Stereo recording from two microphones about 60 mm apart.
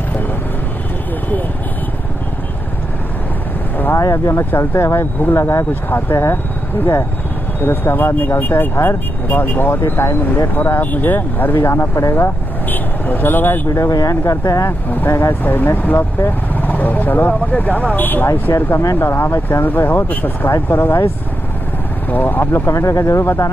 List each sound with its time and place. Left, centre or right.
4.0 s speech: left
5.9 s speech: left
7.6 s speech: left
12.6 s vehicle: left
13.7 s speech: left
14.7 s speech: left
18.7 s speech: left
18.9 s speech: left
19.6 s speech: left
22.1 s speech: left
22.5 s speech: left